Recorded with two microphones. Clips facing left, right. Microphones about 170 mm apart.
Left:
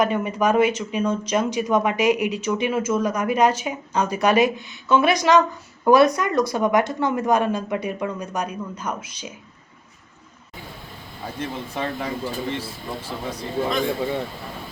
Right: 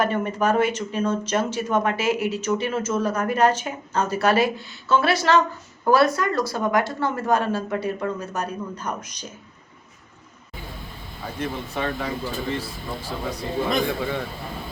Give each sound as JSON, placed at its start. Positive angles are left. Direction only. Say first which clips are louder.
{"t": 0.0, "sound": "speech", "louder": "left 2 dB", "side_deg": 10}
{"t": 11.3, "sound": "a man's voice", "louder": "right 1 dB", "side_deg": 30}